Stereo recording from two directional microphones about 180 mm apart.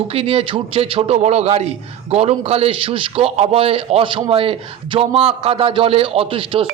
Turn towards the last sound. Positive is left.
turn(degrees=-30)  # may be behind; listen again after turning